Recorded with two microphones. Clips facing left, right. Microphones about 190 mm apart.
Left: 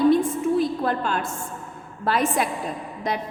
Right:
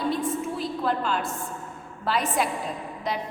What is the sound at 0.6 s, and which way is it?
A woman's voice, 50° left (ahead or behind).